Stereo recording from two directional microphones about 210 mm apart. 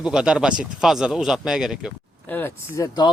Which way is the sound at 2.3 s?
15° left (ahead or behind).